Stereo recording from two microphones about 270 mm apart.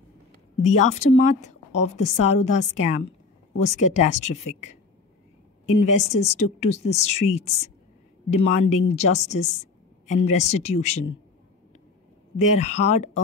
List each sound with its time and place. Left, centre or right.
0.7 s a woman's voice: left
5.7 s a woman's voice: left
12.4 s a woman's voice: left